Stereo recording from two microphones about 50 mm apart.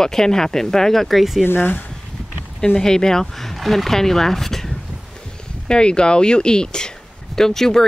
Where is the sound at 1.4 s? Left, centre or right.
Left.